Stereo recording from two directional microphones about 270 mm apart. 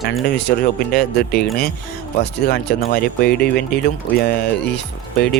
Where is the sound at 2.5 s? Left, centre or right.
Left.